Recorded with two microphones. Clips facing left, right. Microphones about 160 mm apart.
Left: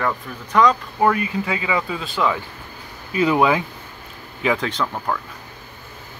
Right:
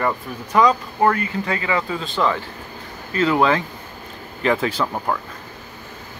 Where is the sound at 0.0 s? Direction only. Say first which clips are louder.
Right 1 dB; 5° right (ahead or behind).